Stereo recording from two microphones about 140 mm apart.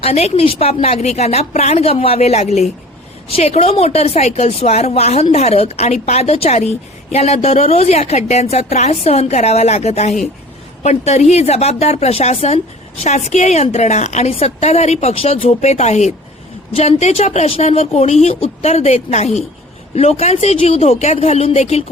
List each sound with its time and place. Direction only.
0.0 s a woman's voice: 50° left (ahead or behind)